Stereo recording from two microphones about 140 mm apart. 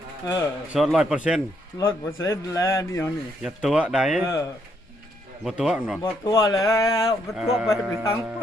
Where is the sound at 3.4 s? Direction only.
5° right (ahead or behind).